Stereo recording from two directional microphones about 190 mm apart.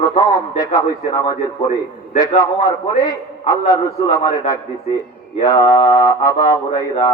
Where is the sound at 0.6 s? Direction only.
20° left (ahead or behind).